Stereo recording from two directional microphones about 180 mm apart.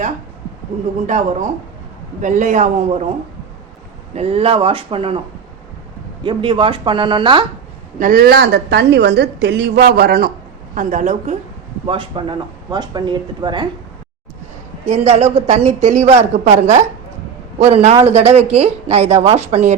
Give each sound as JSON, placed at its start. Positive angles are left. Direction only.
{"t": 1.0, "sound": "a man's voice", "side_deg": -45}
{"t": 4.1, "sound": "speech", "side_deg": -35}
{"t": 6.2, "sound": "speech", "side_deg": -30}
{"t": 7.9, "sound": "a woman's voice", "side_deg": -50}
{"t": 10.8, "sound": "a man's voice", "side_deg": -45}
{"t": 11.9, "sound": "speech", "side_deg": -30}
{"t": 14.8, "sound": "speech", "side_deg": -35}